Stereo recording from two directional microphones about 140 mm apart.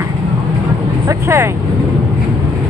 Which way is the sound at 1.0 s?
20° right (ahead or behind).